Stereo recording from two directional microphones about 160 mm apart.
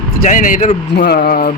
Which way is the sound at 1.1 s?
70° left (ahead or behind).